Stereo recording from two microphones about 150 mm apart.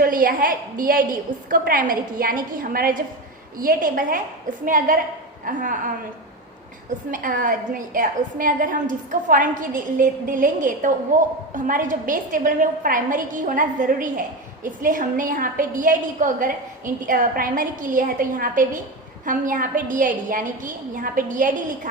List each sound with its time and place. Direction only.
0.0 s a woman's voice: 75° right (ahead or behind)
7.1 s a woman's voice: 65° right (ahead or behind)